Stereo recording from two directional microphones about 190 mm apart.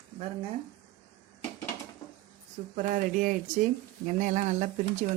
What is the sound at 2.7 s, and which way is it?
Speech, 45° right (ahead or behind).